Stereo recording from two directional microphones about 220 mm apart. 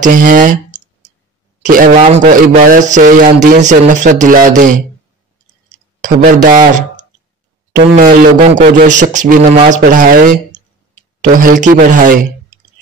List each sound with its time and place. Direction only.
0.0 s a man's voice: 35° right (ahead or behind)
5.9 s a man's voice: 35° right (ahead or behind)